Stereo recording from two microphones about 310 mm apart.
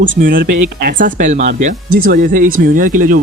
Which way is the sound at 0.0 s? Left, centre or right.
Right.